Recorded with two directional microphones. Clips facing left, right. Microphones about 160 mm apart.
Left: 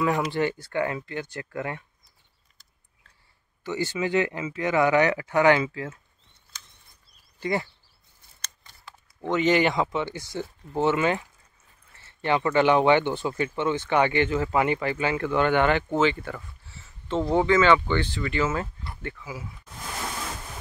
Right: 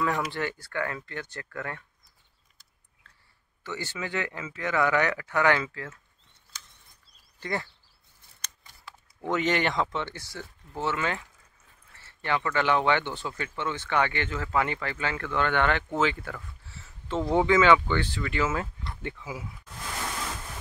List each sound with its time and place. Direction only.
0.3 s speech: 20° left (ahead or behind)
3.6 s speech: 15° left (ahead or behind)
7.3 s speech: 15° left (ahead or behind)
8.4 s speech: 10° right (ahead or behind); by 16.0 s 10° left (ahead or behind)
16.0 s speech: centre (ahead or behind)
16.6 s a sound: centre (ahead or behind)
17.3 s speech: 10° right (ahead or behind)
19.0 s speech: 20° right (ahead or behind)